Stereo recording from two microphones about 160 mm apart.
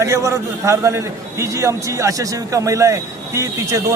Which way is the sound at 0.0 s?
20° right (ahead or behind).